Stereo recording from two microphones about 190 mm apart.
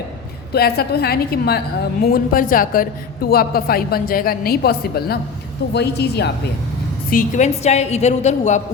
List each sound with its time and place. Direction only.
0.5 s a woman's voice: 55° left (ahead or behind)
7.1 s a woman's voice: 45° left (ahead or behind)